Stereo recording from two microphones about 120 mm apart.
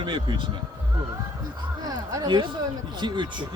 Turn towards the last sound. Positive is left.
turn(degrees=-40)  # may be behind; listen again after turning